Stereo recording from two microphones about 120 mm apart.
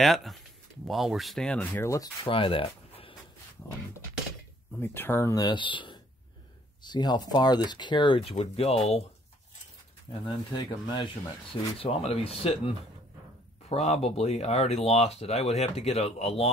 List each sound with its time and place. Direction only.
0.0 s speech: centre (ahead or behind); by 2.0 s 20° left (ahead or behind)
2.2 s speech: 50° left (ahead or behind)
4.7 s speech: 20° left (ahead or behind)
5.4 s speech: 40° left (ahead or behind); by 9.0 s 60° left (ahead or behind)
10.2 s speech: 40° left (ahead or behind)
11.5 s speech: 50° left (ahead or behind)